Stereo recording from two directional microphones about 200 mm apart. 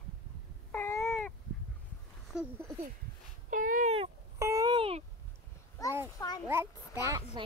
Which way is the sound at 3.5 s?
40° right (ahead or behind).